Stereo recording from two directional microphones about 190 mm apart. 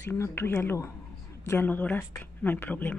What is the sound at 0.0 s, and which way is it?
Speech, 10° left (ahead or behind).